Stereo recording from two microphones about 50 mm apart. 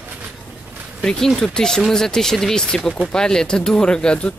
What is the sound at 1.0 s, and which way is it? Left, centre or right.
Speech, centre.